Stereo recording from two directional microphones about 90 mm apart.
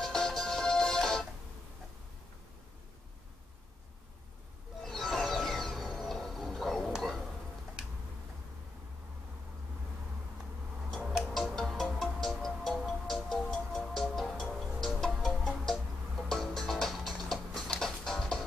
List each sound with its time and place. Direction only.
0.0 s music: 5° left (ahead or behind)
4.8 s a sound: 5° left (ahead or behind)
11.0 s music: 5° right (ahead or behind)